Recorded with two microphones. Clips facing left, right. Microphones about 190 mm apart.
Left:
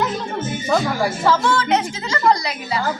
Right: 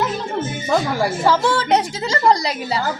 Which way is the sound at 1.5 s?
30° right (ahead or behind).